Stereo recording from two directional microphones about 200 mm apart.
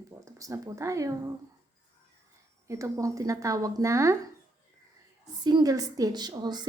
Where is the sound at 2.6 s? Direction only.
15° right (ahead or behind).